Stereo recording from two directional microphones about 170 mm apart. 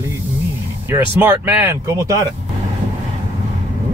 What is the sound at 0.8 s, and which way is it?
Speech, 10° right (ahead or behind).